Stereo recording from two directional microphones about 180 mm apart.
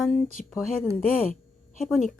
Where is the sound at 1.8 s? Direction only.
Centre (ahead or behind).